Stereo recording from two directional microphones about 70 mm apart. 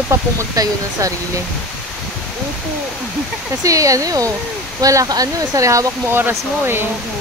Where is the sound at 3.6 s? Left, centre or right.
Right.